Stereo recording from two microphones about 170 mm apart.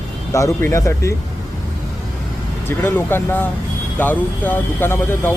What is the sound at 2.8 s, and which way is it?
Speech, 15° left (ahead or behind).